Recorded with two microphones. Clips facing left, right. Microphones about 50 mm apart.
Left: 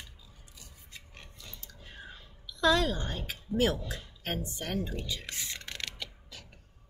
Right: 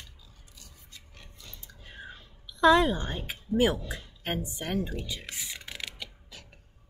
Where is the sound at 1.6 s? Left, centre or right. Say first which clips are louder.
Right 4 dB; centre.